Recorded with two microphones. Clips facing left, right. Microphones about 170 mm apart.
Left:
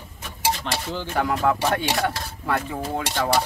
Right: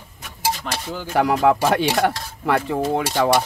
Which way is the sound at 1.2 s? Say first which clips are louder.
Right 5 dB; 80° right.